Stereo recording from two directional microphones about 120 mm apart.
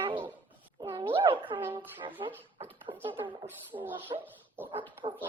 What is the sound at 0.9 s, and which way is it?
Speech, 45° right (ahead or behind).